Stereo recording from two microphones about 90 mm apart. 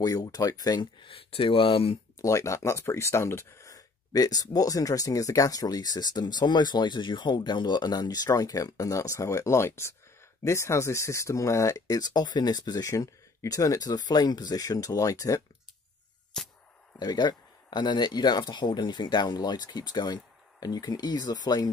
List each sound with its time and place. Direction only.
0.0 s speech: 45° left (ahead or behind)
1.0 s speech: 85° left
2.1 s speech: 35° left (ahead or behind)
16.3 s music: 5° left (ahead or behind)
17.0 s speech: 50° left (ahead or behind)